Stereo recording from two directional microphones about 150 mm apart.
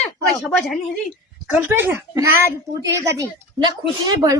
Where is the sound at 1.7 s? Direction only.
15° right (ahead or behind).